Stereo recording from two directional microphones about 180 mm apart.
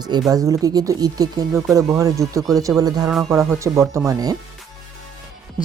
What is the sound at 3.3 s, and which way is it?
Speech, 15° right (ahead or behind).